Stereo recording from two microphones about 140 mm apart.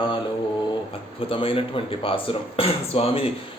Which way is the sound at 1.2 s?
40° left (ahead or behind).